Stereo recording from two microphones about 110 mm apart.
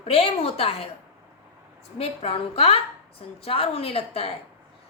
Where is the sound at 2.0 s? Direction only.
65° left (ahead or behind).